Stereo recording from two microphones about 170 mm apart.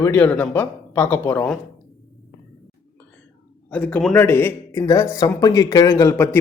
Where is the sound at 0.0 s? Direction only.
10° left (ahead or behind).